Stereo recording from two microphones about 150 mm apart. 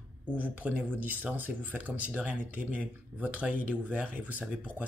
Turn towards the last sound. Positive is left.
turn(degrees=-10)  # may be behind; listen again after turning